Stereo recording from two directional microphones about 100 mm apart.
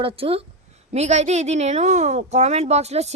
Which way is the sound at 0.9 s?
90° right.